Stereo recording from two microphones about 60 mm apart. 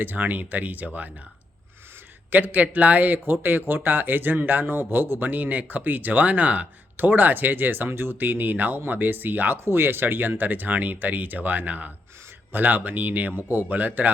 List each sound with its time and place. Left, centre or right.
0.0 s a man's voice: right
2.3 s a man's voice: right